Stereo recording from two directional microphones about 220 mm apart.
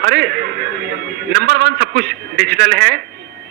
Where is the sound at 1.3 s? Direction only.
45° right (ahead or behind).